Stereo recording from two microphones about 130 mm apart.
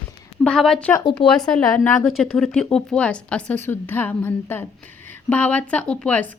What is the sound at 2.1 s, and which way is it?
A woman's voice, centre (ahead or behind).